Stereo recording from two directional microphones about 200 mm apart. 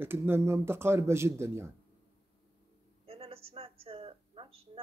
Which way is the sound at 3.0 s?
30° right (ahead or behind).